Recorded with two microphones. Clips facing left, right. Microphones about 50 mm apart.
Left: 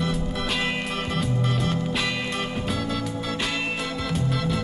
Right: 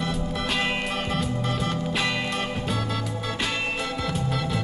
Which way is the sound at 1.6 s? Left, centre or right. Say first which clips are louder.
Even; centre.